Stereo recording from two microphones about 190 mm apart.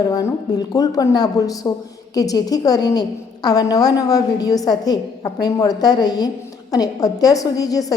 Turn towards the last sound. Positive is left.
turn(degrees=20)  # may be behind; listen again after turning